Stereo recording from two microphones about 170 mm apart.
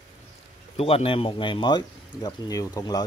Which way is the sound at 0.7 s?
35° left (ahead or behind).